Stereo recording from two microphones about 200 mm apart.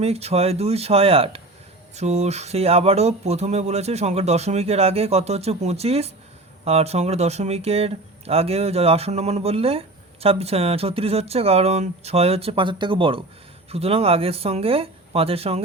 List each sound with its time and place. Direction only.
0.0 s speech: 30° right (ahead or behind)